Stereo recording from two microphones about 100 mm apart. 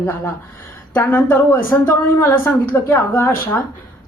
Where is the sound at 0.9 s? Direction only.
15° left (ahead or behind).